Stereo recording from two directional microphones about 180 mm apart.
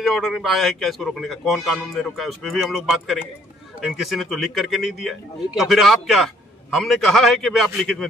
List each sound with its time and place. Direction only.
0.0 s speech: centre (ahead or behind)